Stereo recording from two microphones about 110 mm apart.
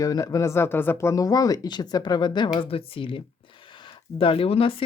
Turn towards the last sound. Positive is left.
turn(degrees=60)  # may be behind; listen again after turning